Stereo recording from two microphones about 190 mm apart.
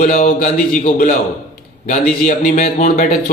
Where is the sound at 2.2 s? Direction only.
40° left (ahead or behind).